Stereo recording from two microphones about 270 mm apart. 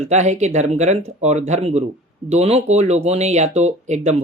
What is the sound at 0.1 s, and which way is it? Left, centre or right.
Speech, right.